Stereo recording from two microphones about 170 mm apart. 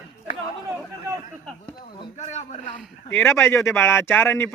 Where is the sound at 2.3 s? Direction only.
40° left (ahead or behind).